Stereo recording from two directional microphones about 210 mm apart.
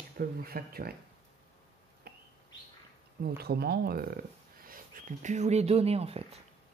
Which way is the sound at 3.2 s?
50° right (ahead or behind).